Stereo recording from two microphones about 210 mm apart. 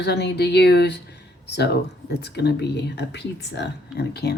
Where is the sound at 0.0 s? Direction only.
50° left (ahead or behind).